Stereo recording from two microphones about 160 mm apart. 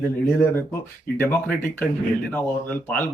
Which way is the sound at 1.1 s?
15° left (ahead or behind).